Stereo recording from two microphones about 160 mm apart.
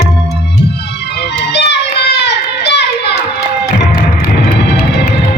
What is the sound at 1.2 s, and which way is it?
Music, 90° left.